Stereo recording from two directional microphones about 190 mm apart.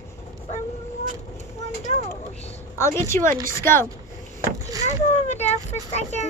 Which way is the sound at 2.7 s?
15° left (ahead or behind).